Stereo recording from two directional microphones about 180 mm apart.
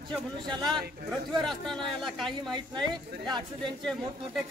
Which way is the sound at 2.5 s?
25° right (ahead or behind).